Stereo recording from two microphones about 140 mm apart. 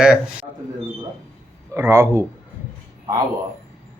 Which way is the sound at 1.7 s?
20° right (ahead or behind).